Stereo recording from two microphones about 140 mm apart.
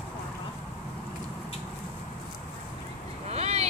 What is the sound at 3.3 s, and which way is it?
Vehicle, 50° right (ahead or behind).